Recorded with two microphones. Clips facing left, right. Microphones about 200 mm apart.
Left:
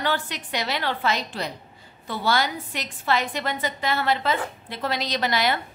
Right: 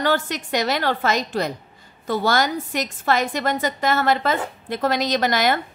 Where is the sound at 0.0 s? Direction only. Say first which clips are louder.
Right 5 dB; 45° right (ahead or behind).